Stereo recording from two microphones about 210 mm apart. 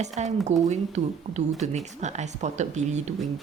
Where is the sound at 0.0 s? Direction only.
35° right (ahead or behind).